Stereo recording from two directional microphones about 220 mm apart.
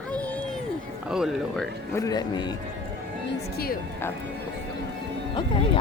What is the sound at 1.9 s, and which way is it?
Speech, 15° left (ahead or behind).